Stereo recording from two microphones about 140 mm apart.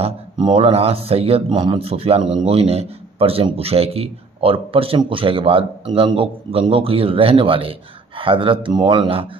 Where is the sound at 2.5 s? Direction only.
45° right (ahead or behind).